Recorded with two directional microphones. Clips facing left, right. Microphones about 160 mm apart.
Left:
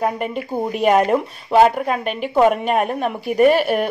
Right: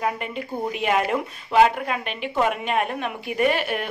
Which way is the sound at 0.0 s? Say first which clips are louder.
Left 5 dB; 45° left (ahead or behind).